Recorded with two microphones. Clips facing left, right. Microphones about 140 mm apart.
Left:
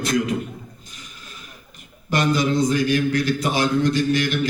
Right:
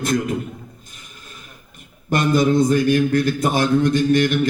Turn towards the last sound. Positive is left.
turn(degrees=-50)  # may be behind; listen again after turning